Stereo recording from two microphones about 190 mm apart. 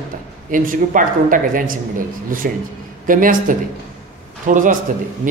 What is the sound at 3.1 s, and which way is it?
Speech, 45° right (ahead or behind).